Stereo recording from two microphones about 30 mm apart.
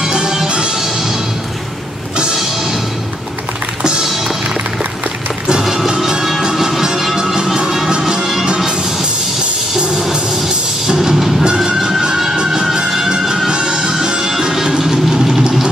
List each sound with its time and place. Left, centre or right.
0.5 s music: right
5.6 s music: centre
8.0 s music: right
10.9 s music: centre
11.1 s music: centre
11.4 s music: right
13.5 s music: right
14.8 s vehicle: centre